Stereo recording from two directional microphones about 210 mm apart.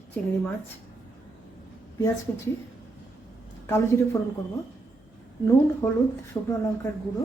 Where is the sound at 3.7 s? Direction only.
10° left (ahead or behind).